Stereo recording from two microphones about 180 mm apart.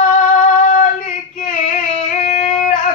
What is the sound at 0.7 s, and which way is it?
Female singing, 45° left (ahead or behind).